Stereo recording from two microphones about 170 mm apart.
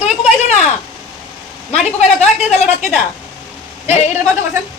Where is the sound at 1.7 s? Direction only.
40° left (ahead or behind).